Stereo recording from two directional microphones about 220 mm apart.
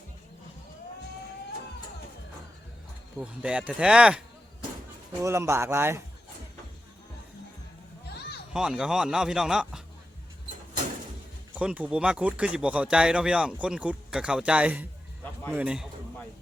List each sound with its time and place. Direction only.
3.2 s speech: 5° right (ahead or behind)
5.2 s speech: 10° right (ahead or behind)
8.0 s a sound: 45° left (ahead or behind)
8.5 s speech: centre (ahead or behind)
11.5 s speech: 5° right (ahead or behind)
15.5 s a sound: 5° right (ahead or behind)